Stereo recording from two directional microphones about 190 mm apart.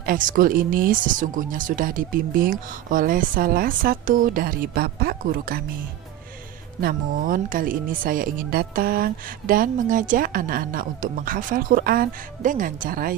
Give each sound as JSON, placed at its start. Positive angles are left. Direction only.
{"t": 0.0, "sound": "speech", "side_deg": -45}
{"t": 6.8, "sound": "speech", "side_deg": -50}